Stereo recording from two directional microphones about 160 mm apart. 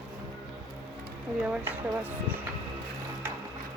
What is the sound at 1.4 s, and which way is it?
Speech, 10° right (ahead or behind).